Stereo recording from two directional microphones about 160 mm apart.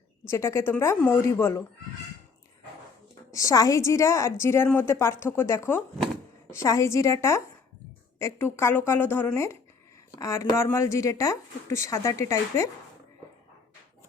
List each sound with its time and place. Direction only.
0.3 s a woman's voice: 15° left (ahead or behind)
3.3 s a woman's voice: 20° left (ahead or behind)